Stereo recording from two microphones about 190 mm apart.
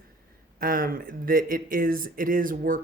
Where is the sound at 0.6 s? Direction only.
50° right (ahead or behind).